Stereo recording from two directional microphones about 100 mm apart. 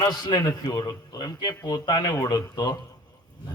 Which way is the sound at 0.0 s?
40° left (ahead or behind).